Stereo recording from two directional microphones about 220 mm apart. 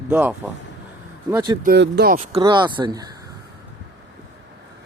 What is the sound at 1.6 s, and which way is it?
Speech, 50° right (ahead or behind).